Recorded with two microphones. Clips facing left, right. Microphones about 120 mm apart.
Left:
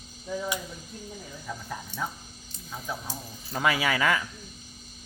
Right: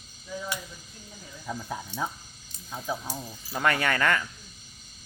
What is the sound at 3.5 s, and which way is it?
Speech, 5° left (ahead or behind).